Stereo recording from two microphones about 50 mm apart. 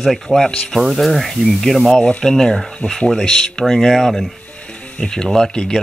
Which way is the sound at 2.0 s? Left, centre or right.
Left.